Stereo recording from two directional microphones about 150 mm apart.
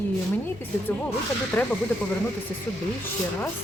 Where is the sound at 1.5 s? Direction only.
15° left (ahead or behind).